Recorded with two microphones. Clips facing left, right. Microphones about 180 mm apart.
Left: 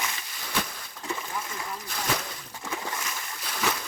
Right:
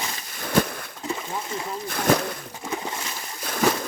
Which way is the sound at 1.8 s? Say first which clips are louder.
Right 11 dB; 50° right (ahead or behind).